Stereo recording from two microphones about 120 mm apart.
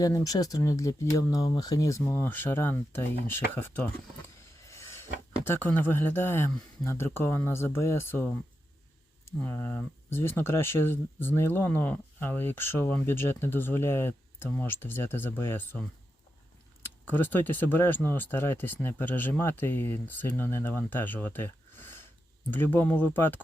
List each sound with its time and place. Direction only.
0.0 s speech: 30° left (ahead or behind)
4.6 s a sound: 25° left (ahead or behind)
5.6 s speech: 15° left (ahead or behind)
16.8 s speech: 15° left (ahead or behind)